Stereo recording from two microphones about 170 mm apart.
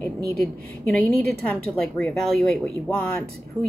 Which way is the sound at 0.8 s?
5° left (ahead or behind).